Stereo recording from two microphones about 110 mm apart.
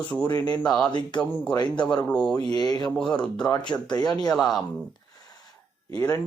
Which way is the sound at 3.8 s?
40° left (ahead or behind).